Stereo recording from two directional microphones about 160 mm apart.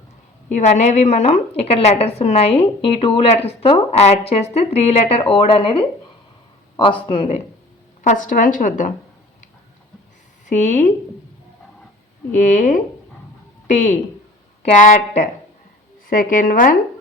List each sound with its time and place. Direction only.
0.6 s a woman's voice: 45° left (ahead or behind)
8.0 s a woman's voice: 55° left (ahead or behind)
10.4 s a woman's voice: 50° left (ahead or behind)
12.3 s a woman's voice: 55° left (ahead or behind)